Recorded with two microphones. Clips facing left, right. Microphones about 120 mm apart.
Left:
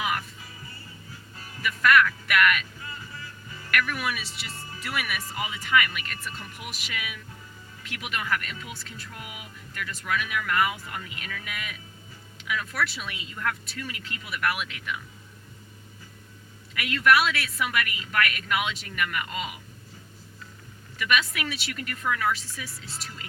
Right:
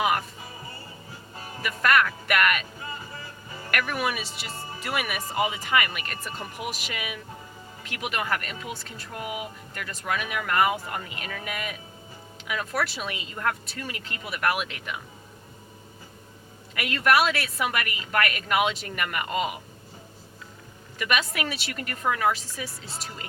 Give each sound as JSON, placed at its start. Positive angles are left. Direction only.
{"t": 0.0, "sound": "music", "side_deg": -40}
{"t": 0.4, "sound": "music", "side_deg": -25}
{"t": 2.8, "sound": "music", "side_deg": -25}
{"t": 4.4, "sound": "speech", "side_deg": -25}
{"t": 4.9, "sound": "a woman's voice", "side_deg": -45}
{"t": 6.1, "sound": "speech", "side_deg": -30}
{"t": 6.8, "sound": "a woman's voice", "side_deg": -45}
{"t": 8.7, "sound": "speech", "side_deg": -30}
{"t": 9.1, "sound": "speech", "side_deg": -50}
{"t": 16.7, "sound": "speech", "side_deg": -40}
{"t": 17.7, "sound": "a woman's voice", "side_deg": -45}
{"t": 21.0, "sound": "speech", "side_deg": -40}